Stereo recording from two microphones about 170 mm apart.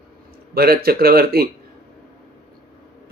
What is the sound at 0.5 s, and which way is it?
Speech, 65° right (ahead or behind).